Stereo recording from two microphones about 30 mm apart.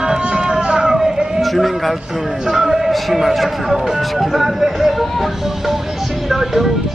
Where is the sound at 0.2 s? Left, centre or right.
Right; by 1.1 s centre.